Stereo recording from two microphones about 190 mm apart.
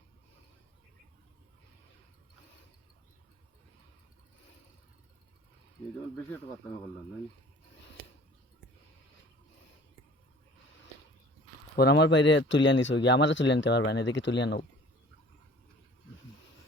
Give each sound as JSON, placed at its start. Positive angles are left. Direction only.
{"t": 11.8, "sound": "speech", "side_deg": 60}